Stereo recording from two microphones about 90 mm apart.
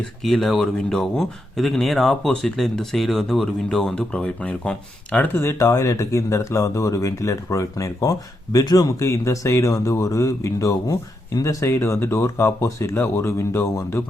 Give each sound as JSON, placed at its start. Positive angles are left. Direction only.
{"t": 0.2, "sound": "speech", "side_deg": 0}
{"t": 5.4, "sound": "speech", "side_deg": 30}